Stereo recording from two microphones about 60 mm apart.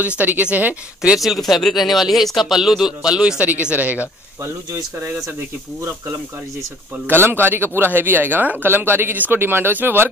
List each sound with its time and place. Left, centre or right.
0.2 s speech: right
1.1 s speech: centre; by 4.0 s right
7.1 s speech: right